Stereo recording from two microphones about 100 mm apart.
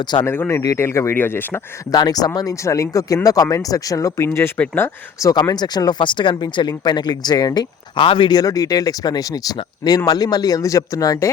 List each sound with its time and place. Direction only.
0.3 s speech: 20° left (ahead or behind)
1.9 s speech: 40° left (ahead or behind); by 4.9 s 15° left (ahead or behind)
5.2 s speech: 40° left (ahead or behind)
8.0 s speech: 55° left (ahead or behind)
8.4 s speech: 35° left (ahead or behind)